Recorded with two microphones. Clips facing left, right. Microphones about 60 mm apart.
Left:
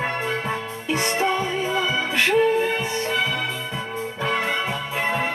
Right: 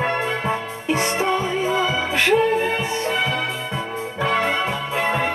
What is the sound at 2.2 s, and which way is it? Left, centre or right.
Music, centre.